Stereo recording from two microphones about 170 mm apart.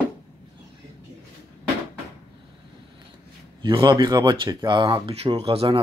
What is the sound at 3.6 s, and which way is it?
Speech, 30° right (ahead or behind).